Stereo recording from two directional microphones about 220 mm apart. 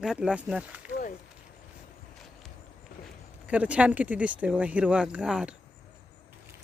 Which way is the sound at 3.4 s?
5° right (ahead or behind).